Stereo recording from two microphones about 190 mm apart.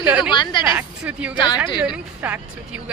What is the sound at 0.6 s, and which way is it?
Speech, 5° right (ahead or behind).